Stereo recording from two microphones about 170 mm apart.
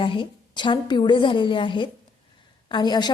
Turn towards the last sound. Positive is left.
turn(degrees=25)  # may be behind; listen again after turning